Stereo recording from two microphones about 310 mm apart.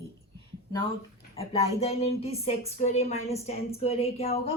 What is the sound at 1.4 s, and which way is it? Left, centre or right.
A woman's voice, centre.